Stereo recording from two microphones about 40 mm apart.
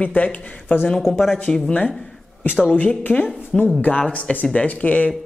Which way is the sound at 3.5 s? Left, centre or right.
Centre.